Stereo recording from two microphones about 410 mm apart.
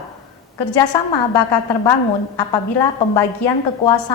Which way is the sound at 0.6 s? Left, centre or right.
Left.